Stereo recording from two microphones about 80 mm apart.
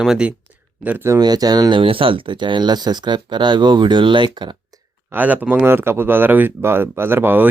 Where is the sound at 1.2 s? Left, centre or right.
Right.